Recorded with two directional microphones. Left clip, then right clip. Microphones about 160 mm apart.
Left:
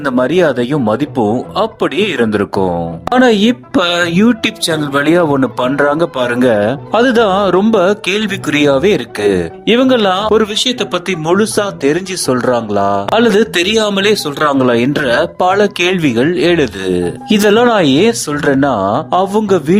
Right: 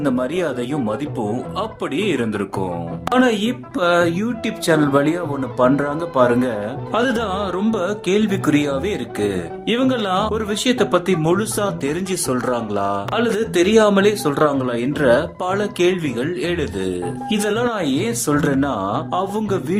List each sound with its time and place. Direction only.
0.0 s speech: 45° left (ahead or behind)
4.7 s speech: 5° left (ahead or behind)
4.9 s speech: 50° left (ahead or behind)
13.7 s speech: 5° left (ahead or behind)
14.3 s speech: 45° left (ahead or behind)